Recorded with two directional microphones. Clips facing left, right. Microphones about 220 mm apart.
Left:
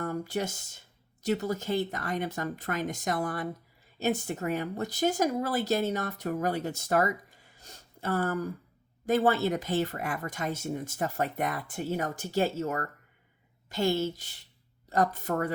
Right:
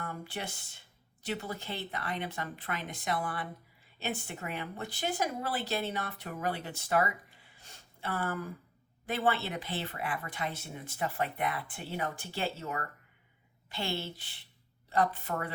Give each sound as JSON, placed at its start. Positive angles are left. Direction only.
{"t": 0.0, "sound": "speech", "side_deg": 40}